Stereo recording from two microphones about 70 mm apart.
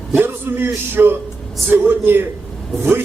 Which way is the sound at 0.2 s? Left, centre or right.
Right.